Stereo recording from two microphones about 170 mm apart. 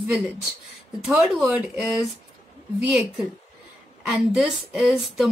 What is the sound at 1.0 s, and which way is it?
Speech, 5° right (ahead or behind).